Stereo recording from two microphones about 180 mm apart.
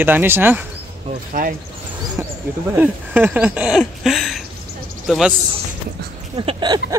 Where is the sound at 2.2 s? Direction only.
15° right (ahead or behind).